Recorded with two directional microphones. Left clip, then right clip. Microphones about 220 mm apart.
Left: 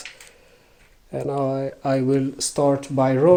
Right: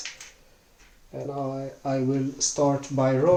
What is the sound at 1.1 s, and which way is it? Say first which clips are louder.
Speech: left 8 dB; 50° left (ahead or behind).